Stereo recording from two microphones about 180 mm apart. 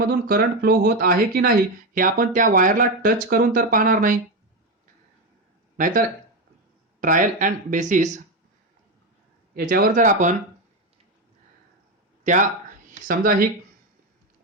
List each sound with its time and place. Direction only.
0.0 s speech: 55° right (ahead or behind)
5.7 s speech: 50° right (ahead or behind)
9.6 s speech: 50° right (ahead or behind)
12.2 s speech: 45° right (ahead or behind)